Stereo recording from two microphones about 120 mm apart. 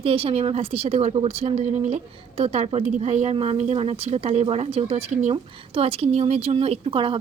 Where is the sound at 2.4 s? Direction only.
60° right (ahead or behind).